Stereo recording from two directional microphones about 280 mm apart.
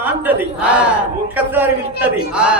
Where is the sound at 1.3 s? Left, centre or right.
Centre.